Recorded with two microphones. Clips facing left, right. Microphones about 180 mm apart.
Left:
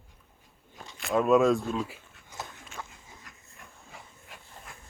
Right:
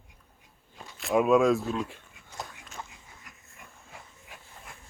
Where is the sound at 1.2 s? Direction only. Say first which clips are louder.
Left 1 dB; centre (ahead or behind).